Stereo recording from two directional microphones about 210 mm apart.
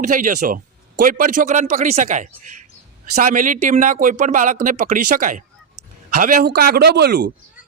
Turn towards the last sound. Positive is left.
turn(degrees=-50)  # may be behind; listen again after turning